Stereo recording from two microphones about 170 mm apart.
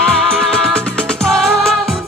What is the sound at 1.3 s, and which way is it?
Music, 5° left (ahead or behind).